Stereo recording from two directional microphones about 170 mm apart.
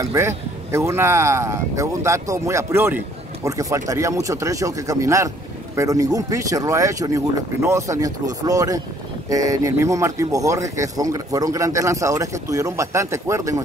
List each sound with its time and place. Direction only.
0.0 s speech: 15° right (ahead or behind)